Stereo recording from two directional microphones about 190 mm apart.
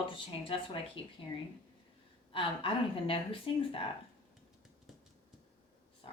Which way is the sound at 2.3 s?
30° left (ahead or behind).